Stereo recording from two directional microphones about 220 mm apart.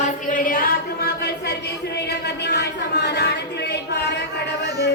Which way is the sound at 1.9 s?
50° left (ahead or behind).